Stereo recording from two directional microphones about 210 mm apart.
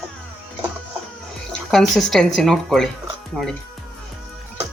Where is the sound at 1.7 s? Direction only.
Centre (ahead or behind).